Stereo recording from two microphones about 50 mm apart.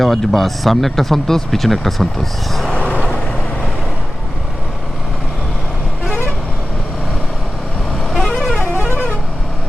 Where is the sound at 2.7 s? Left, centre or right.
Left.